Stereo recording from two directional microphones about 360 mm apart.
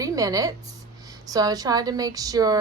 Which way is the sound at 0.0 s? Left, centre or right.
Centre.